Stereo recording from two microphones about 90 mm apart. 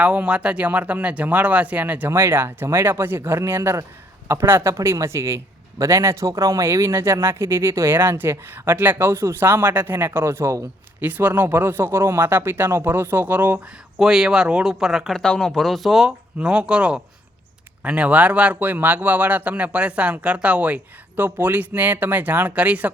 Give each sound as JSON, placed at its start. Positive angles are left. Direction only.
{"t": 0.0, "sound": "speech", "side_deg": -15}
{"t": 14.0, "sound": "speech", "side_deg": -5}